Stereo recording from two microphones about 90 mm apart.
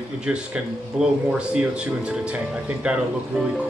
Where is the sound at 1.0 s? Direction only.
5° right (ahead or behind).